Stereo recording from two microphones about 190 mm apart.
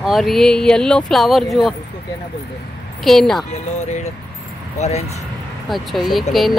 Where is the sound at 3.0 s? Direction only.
Centre (ahead or behind).